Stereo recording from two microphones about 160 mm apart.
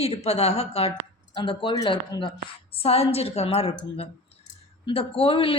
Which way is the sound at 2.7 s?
40° left (ahead or behind).